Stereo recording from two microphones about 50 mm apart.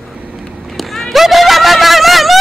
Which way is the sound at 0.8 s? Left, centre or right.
Centre.